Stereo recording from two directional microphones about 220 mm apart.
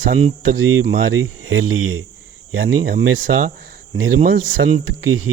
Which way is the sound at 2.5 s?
40° right (ahead or behind).